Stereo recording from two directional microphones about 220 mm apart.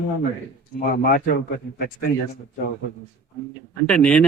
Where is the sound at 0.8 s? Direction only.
40° left (ahead or behind).